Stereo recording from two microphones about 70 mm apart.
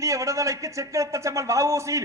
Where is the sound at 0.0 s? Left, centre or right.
Right.